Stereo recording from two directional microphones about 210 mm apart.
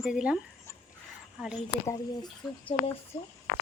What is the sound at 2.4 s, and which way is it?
Speech, centre (ahead or behind).